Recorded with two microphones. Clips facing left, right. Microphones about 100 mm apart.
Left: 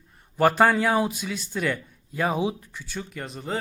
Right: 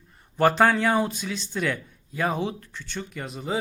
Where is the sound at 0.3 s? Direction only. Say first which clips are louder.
Even; 5° left (ahead or behind).